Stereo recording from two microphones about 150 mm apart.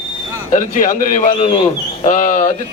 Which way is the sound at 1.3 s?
40° left (ahead or behind).